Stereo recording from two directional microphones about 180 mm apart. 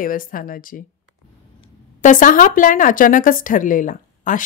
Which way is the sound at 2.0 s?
45° left (ahead or behind).